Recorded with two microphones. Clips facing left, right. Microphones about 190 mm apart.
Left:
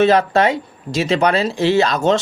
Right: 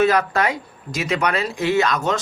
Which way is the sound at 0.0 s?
25° left (ahead or behind).